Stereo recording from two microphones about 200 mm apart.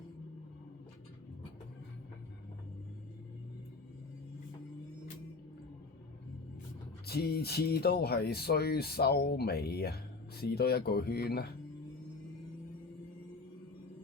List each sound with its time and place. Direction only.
7.0 s speech: 50° left (ahead or behind)